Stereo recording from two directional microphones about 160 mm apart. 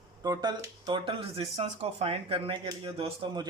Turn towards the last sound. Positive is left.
turn(degrees=-30)  # may be behind; listen again after turning